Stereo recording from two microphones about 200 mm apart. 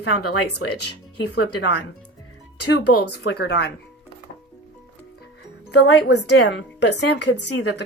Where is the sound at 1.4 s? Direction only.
55° left (ahead or behind).